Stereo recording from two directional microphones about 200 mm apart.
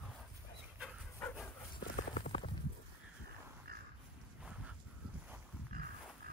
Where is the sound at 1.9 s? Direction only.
40° left (ahead or behind).